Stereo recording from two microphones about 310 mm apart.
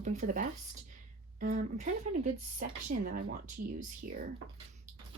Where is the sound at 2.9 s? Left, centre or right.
Right.